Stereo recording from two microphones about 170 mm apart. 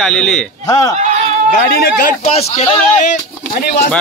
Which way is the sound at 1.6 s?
60° left (ahead or behind).